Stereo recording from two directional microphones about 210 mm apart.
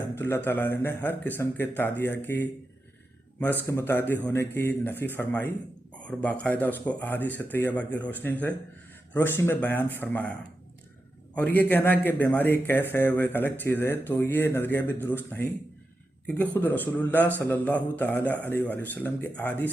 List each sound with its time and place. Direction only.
0.2 s a man's voice: 10° left (ahead or behind)
11.3 s a man's voice: 10° left (ahead or behind)